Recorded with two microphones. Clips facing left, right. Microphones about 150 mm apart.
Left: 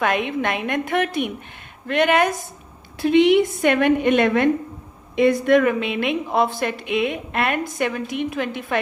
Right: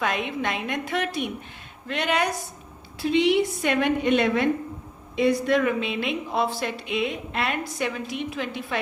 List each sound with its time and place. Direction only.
0.0 s speech: 60° left (ahead or behind)